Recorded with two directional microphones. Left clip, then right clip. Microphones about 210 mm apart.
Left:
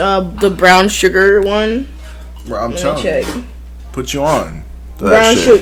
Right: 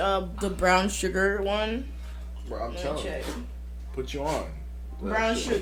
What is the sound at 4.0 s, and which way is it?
Speech, 50° left (ahead or behind).